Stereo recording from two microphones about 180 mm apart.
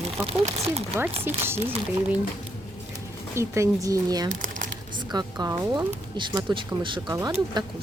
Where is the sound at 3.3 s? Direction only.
15° right (ahead or behind).